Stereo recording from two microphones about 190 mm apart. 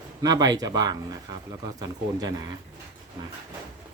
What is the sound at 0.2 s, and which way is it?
Speech, 20° right (ahead or behind).